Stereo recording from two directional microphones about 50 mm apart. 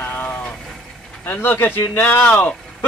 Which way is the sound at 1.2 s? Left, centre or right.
Left.